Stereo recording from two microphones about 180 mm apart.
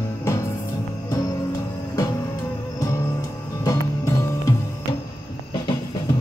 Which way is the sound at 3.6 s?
15° left (ahead or behind).